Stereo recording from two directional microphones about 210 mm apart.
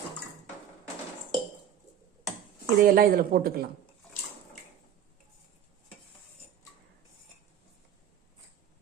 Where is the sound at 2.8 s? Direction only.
45° right (ahead or behind).